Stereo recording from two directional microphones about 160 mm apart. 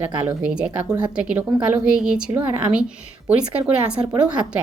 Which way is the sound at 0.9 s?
25° right (ahead or behind).